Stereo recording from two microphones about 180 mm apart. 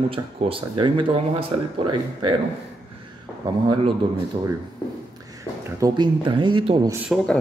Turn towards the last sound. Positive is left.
turn(degrees=5)  # may be behind; listen again after turning